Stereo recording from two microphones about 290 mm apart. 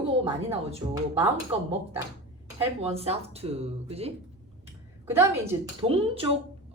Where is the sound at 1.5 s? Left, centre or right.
Centre.